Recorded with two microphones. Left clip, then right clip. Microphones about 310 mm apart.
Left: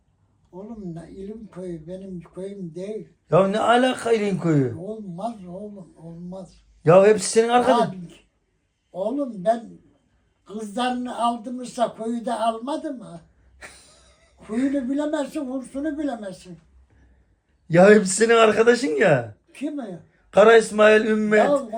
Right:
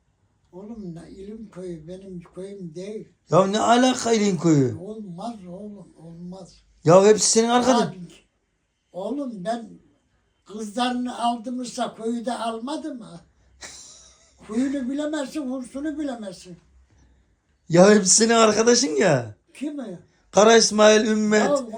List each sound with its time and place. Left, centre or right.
1.5 s a man's voice: centre
6.8 s a man's voice: centre
14.3 s speech: centre
17.7 s a man's voice: centre